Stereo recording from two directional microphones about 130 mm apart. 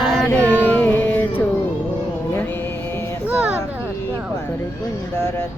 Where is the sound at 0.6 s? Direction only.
15° left (ahead or behind).